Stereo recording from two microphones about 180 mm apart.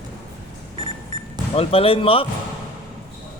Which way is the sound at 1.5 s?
30° left (ahead or behind).